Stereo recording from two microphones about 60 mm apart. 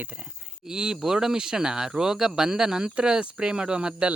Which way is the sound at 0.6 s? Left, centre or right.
Centre.